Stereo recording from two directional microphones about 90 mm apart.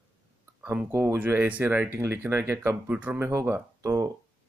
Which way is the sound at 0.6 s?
20° right (ahead or behind).